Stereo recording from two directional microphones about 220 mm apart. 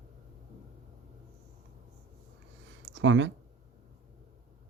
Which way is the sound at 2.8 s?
55° right (ahead or behind).